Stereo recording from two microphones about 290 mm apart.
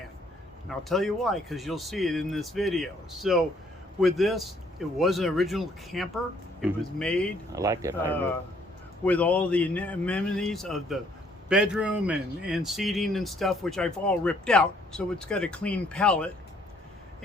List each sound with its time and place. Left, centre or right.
0.7 s speech: centre
7.5 s speech: centre
9.0 s speech: centre